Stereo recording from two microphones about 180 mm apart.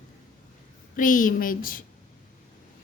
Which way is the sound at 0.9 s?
50° left (ahead or behind).